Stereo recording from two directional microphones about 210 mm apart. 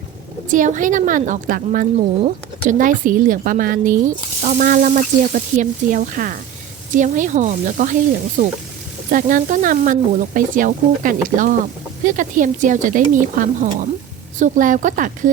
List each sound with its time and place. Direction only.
0.4 s a woman's voice: 40° right (ahead or behind)